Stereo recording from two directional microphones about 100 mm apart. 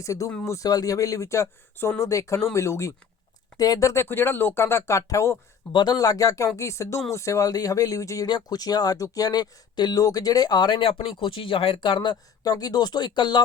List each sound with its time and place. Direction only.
0.0 s speech: 35° left (ahead or behind)
5.7 s speech: 45° left (ahead or behind)